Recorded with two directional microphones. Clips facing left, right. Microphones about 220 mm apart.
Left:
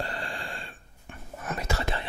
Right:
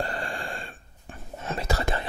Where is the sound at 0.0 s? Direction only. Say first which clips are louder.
Right 4 dB; 45° right (ahead or behind).